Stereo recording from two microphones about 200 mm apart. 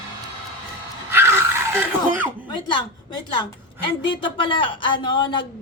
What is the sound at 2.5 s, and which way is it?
A woman's voice, 25° left (ahead or behind).